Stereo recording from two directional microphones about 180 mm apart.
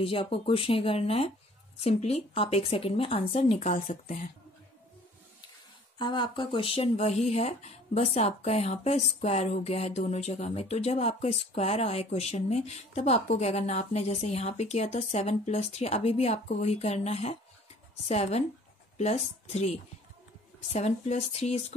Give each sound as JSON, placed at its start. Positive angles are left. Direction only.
{"t": 0.0, "sound": "speech", "side_deg": 30}
{"t": 5.9, "sound": "speech", "side_deg": 25}